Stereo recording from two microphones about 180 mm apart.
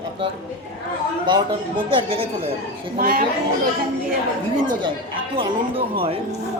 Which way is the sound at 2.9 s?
55° right (ahead or behind).